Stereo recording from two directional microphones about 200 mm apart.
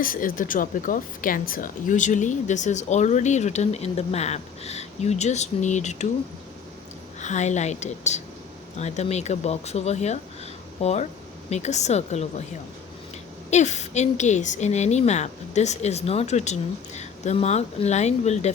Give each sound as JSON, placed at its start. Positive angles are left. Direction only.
{"t": 0.0, "sound": "a woman's voice", "side_deg": 45}
{"t": 7.2, "sound": "a woman's voice", "side_deg": 35}
{"t": 13.5, "sound": "a woman's voice", "side_deg": 35}